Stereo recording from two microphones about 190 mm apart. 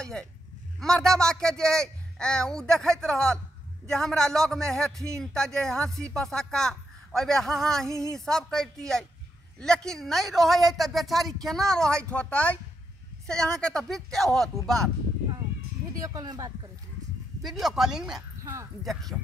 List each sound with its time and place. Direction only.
0.0 s speech: 5° left (ahead or behind)
7.9 s speech: 15° right (ahead or behind)
8.3 s speech: centre (ahead or behind)
16.0 s speech: 20° right (ahead or behind)
17.4 s speech: centre (ahead or behind)
18.4 s speech: 15° right (ahead or behind)